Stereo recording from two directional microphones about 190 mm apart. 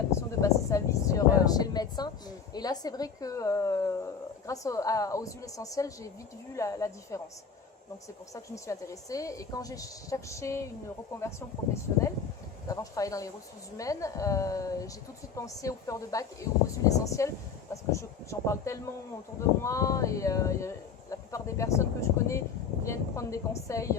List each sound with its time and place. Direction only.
0.1 s a woman's voice: 15° left (ahead or behind)
8.3 s a woman's voice: 15° left (ahead or behind)